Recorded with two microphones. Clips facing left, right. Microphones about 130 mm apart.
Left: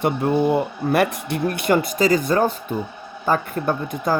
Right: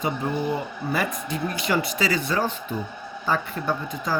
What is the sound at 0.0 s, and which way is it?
Speech, 65° left (ahead or behind).